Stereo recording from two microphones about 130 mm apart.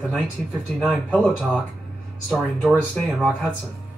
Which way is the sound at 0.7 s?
5° left (ahead or behind).